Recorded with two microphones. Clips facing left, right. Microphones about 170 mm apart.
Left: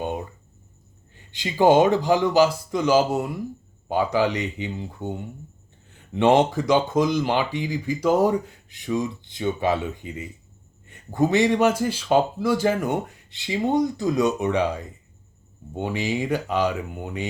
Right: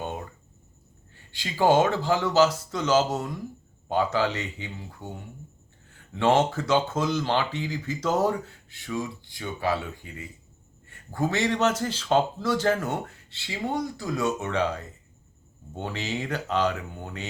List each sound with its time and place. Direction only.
1.1 s speech: 20° left (ahead or behind)